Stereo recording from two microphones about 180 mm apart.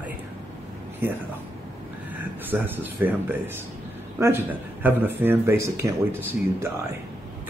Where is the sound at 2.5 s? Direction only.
10° right (ahead or behind).